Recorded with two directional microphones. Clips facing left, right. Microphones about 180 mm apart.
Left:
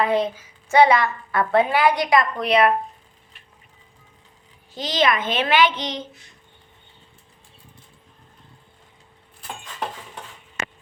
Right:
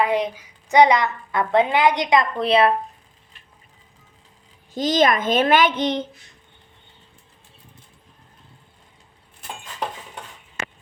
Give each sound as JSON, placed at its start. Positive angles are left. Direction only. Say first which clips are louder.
{"t": 0.0, "sound": "a woman's voice", "louder": "even", "side_deg": -15}
{"t": 4.7, "sound": "a child's voice", "louder": "right 3 dB", "side_deg": -45}